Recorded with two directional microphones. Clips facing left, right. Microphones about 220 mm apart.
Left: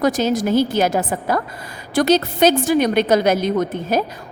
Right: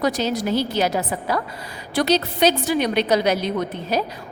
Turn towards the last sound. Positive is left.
turn(degrees=50)  # may be behind; listen again after turning